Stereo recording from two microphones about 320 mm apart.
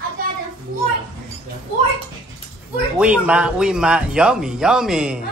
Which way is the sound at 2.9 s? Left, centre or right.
Centre.